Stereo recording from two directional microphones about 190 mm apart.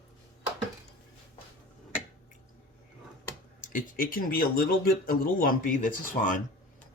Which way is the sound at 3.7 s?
45° left (ahead or behind).